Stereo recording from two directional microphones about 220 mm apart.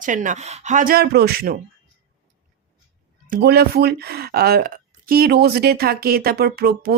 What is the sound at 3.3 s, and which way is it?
Speech, 45° right (ahead or behind).